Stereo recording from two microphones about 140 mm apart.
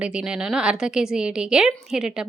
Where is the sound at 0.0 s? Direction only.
5° right (ahead or behind).